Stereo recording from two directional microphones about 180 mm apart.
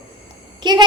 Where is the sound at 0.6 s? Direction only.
25° right (ahead or behind).